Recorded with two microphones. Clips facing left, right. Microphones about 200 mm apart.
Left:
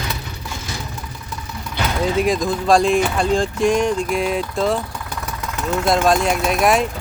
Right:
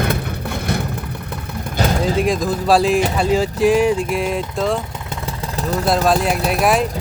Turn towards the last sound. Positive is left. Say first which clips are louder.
# even
turn(degrees=0)  # may be behind; listen again after turning